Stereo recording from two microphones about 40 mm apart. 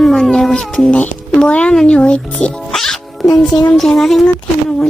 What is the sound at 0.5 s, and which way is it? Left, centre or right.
Speech, left.